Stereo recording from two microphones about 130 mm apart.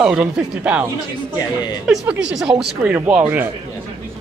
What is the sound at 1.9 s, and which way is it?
Speech, 5° right (ahead or behind).